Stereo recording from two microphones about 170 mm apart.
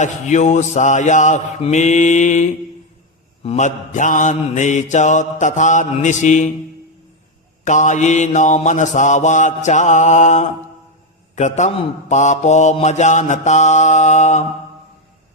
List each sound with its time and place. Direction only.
0.0 s mantra: 45° left (ahead or behind)
7.6 s mantra: 45° left (ahead or behind)